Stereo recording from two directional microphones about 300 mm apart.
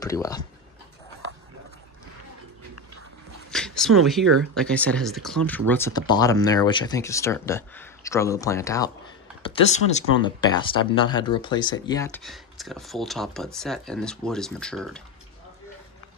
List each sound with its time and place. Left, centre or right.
0.0 s speech: centre
3.5 s speech: centre
9.4 s speech: left; by 15.0 s centre